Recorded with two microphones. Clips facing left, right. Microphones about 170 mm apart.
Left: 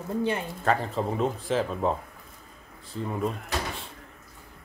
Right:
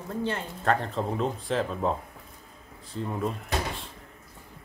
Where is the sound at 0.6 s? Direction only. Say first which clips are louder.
Right 2 dB; 5° left (ahead or behind).